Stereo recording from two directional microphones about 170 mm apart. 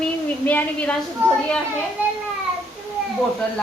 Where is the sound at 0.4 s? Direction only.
10° left (ahead or behind).